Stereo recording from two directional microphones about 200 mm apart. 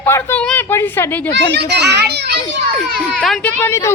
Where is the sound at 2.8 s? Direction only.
Centre (ahead or behind).